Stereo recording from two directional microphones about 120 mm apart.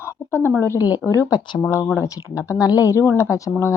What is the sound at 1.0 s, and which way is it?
Speech, 25° left (ahead or behind).